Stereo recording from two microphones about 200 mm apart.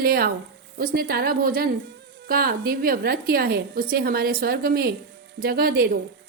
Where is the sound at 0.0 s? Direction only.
50° right (ahead or behind).